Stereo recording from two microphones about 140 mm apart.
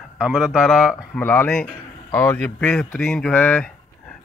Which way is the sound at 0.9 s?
15° left (ahead or behind).